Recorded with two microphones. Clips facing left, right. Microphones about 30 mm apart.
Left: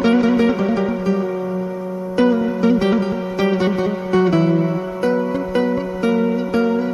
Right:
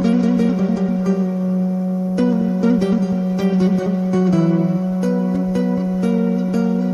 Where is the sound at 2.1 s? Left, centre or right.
Left.